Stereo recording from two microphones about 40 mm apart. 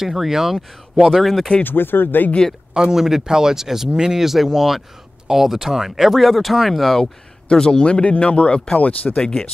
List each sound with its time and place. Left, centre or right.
0.0 s speech: centre
0.9 s speech: centre
1.6 s speech: left
2.7 s speech: centre
3.0 s speech: centre
7.4 s speech: left
8.7 s speech: left